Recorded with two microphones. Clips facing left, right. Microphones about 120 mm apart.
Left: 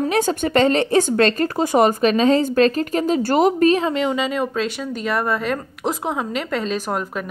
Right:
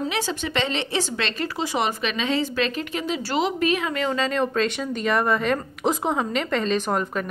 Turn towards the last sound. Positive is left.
turn(degrees=5)  # may be behind; listen again after turning